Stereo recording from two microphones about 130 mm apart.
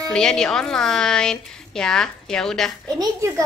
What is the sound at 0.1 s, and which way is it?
A woman's voice, 5° left (ahead or behind).